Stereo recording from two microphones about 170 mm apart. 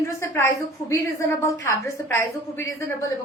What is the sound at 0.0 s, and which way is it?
A woman's voice, 15° left (ahead or behind).